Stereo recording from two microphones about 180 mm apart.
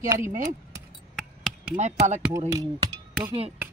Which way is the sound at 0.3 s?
45° right (ahead or behind).